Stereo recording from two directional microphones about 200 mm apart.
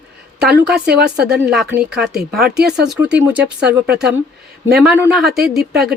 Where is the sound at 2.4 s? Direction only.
55° right (ahead or behind).